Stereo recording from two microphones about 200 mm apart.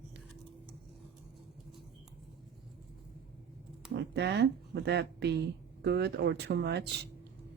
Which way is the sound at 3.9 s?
60° right (ahead or behind).